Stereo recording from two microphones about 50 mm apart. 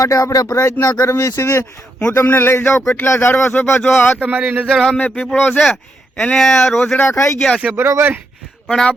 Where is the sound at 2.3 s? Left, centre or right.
Left.